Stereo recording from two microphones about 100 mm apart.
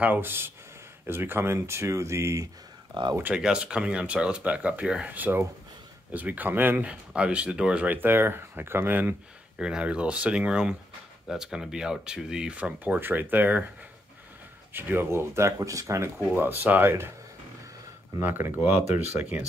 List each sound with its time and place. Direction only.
0.0 s speech: 20° right (ahead or behind); by 3.0 s 35° right (ahead or behind)
3.2 s speech: 10° right (ahead or behind)
9.6 s speech: 10° right (ahead or behind)
14.7 s speech: 20° right (ahead or behind)
18.2 s speech: 20° right (ahead or behind)